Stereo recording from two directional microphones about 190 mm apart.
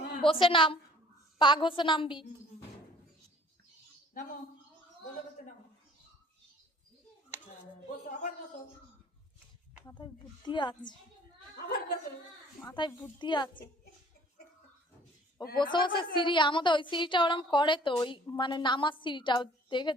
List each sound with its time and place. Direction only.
0.2 s a woman's voice: 25° left (ahead or behind)
7.4 s a sound: 40° left (ahead or behind)
9.9 s a woman's voice: 25° left (ahead or behind)
12.6 s a woman's voice: 25° left (ahead or behind)
15.5 s a woman's voice: 25° left (ahead or behind)